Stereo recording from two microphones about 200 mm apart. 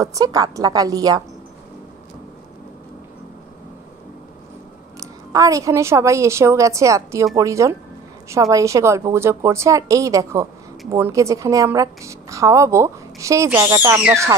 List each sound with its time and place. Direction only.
0.0 s a woman's voice: 15° right (ahead or behind)
5.0 s a woman's voice: 15° right (ahead or behind)